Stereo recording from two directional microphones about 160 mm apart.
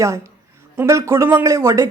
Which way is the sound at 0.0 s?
20° right (ahead or behind).